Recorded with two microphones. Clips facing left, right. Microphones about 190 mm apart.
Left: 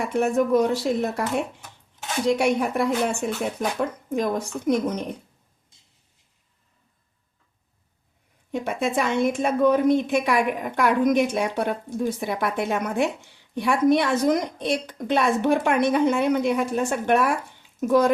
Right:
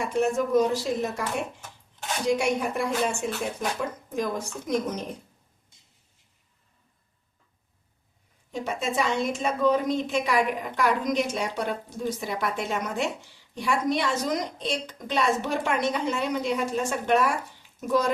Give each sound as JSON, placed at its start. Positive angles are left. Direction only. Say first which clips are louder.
{"t": 0.0, "sound": "speech", "louder": "left 3 dB", "side_deg": 60}
{"t": 2.2, "sound": "speech", "louder": "left 3 dB", "side_deg": 60}
{"t": 8.5, "sound": "speech", "louder": "left 4 dB", "side_deg": 55}